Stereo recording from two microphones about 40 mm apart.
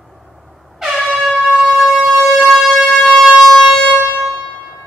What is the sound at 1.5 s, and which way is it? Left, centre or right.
Siren, right.